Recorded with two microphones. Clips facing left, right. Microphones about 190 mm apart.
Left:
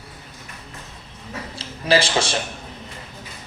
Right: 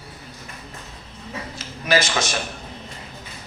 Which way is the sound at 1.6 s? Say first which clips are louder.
Left 2 dB; 30° left (ahead or behind).